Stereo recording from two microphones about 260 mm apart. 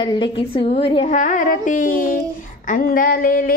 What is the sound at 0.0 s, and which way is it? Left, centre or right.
A woman's voice, centre.